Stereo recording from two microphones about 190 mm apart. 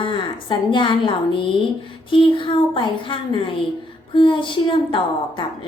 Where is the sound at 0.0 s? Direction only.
25° left (ahead or behind).